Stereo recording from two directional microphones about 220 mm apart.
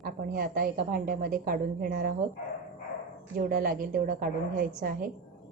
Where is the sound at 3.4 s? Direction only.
40° right (ahead or behind).